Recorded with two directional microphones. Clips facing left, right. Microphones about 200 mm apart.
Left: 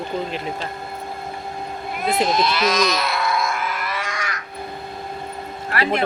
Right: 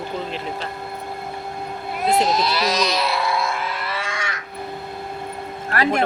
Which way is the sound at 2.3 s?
35° right (ahead or behind).